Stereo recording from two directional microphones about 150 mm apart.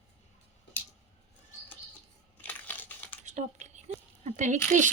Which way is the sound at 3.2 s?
50° right (ahead or behind).